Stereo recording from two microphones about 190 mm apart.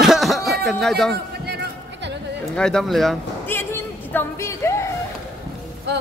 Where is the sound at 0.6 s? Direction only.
Centre (ahead or behind).